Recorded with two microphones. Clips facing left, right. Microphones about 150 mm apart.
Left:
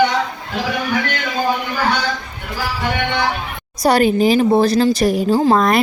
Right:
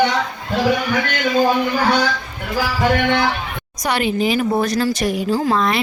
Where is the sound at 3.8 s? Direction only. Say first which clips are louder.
Left 6 dB; 40° left (ahead or behind).